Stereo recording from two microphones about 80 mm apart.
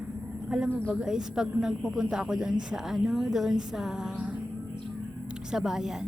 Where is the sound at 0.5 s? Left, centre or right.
Centre.